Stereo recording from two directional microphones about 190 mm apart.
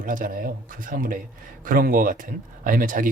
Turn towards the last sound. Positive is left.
turn(degrees=-45)  # may be behind; listen again after turning